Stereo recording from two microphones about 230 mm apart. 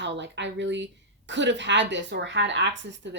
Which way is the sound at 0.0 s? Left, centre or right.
Right.